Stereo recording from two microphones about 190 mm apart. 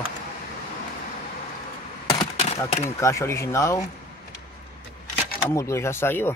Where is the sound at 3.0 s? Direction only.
15° left (ahead or behind).